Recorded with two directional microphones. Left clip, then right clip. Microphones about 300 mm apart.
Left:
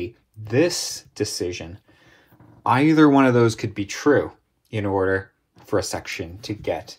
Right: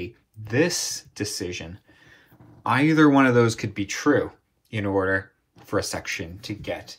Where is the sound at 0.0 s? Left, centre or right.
Centre.